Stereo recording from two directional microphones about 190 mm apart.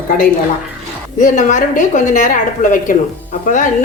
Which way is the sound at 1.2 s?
40° left (ahead or behind).